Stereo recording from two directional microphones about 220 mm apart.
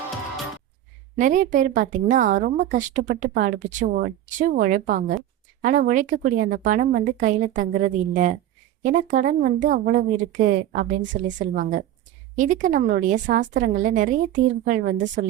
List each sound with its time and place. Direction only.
1.1 s a woman's voice: 35° right (ahead or behind)